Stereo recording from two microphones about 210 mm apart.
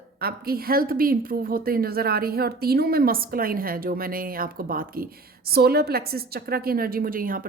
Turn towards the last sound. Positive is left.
turn(degrees=-40)  # may be behind; listen again after turning